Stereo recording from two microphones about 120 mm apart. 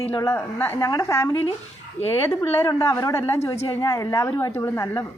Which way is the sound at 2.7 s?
25° left (ahead or behind).